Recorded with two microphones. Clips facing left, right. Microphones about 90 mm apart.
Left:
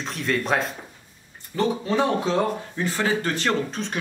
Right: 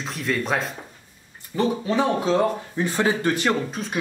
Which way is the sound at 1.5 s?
15° right (ahead or behind).